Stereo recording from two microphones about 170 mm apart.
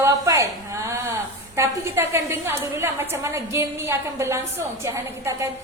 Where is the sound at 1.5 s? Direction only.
15° right (ahead or behind).